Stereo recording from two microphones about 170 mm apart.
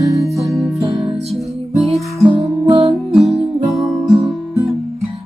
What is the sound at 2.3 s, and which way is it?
Music, 25° right (ahead or behind).